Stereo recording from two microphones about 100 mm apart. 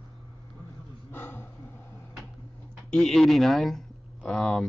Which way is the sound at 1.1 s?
20° left (ahead or behind).